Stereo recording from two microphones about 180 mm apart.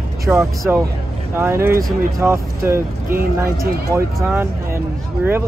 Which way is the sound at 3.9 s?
15° right (ahead or behind).